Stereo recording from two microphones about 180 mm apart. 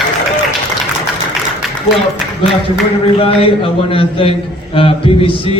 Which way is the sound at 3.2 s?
30° left (ahead or behind).